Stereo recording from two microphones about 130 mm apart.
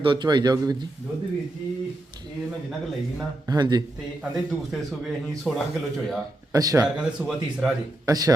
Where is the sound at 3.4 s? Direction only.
30° right (ahead or behind).